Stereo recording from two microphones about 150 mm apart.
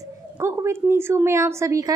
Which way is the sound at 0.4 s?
15° right (ahead or behind).